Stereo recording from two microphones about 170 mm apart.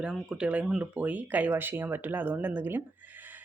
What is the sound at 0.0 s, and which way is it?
Speech, 5° right (ahead or behind).